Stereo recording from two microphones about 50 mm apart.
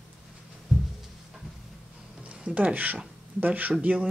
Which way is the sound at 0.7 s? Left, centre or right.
Centre.